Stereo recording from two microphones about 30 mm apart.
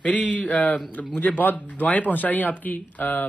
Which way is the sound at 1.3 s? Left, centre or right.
Left.